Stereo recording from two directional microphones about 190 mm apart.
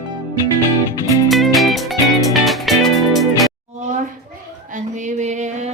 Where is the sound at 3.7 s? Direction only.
40° right (ahead or behind).